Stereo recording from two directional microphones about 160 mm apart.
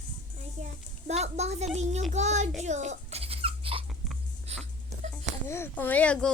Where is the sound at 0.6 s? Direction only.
45° right (ahead or behind).